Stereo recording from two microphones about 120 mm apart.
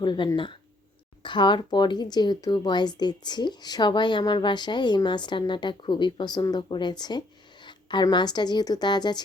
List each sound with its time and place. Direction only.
0.0 s speech: 40° left (ahead or behind)